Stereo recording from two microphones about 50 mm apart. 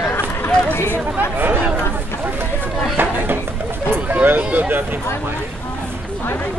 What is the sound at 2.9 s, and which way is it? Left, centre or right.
Music, right.